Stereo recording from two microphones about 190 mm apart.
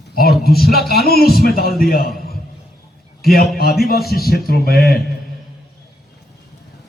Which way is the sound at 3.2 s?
55° left (ahead or behind).